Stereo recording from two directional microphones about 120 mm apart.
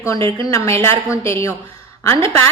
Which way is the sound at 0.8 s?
20° left (ahead or behind).